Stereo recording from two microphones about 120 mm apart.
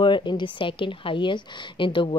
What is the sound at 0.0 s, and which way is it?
A woman's voice, 40° left (ahead or behind).